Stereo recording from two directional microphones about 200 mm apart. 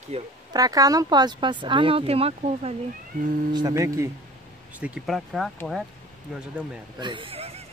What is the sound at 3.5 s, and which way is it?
Speech, 20° right (ahead or behind).